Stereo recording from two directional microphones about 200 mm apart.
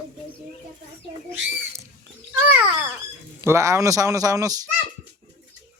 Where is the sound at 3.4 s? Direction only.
15° right (ahead or behind).